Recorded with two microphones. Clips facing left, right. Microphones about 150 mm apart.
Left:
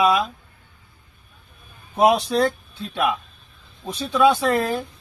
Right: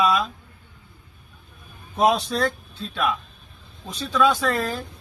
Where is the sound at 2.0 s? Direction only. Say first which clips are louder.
Left 3 dB; 20° left (ahead or behind).